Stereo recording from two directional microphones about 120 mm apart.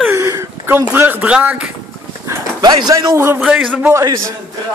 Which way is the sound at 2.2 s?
35° right (ahead or behind).